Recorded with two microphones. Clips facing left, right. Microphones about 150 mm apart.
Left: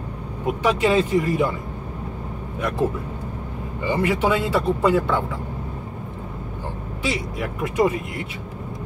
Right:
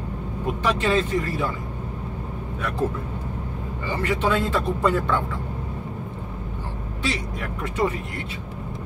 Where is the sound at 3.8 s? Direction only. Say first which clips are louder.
Left 3 dB; 10° left (ahead or behind).